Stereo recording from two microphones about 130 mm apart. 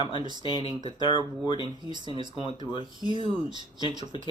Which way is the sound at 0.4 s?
40° left (ahead or behind).